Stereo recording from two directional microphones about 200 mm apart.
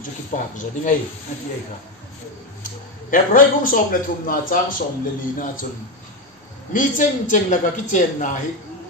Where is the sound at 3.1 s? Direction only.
45° left (ahead or behind).